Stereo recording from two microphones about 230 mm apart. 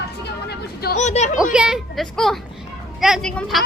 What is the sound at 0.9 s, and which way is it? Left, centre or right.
Speech, left.